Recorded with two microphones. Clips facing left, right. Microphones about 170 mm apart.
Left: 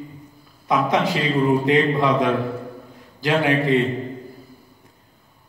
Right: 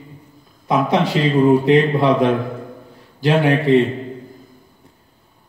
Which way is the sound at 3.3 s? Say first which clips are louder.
Right 4 dB; 35° right (ahead or behind).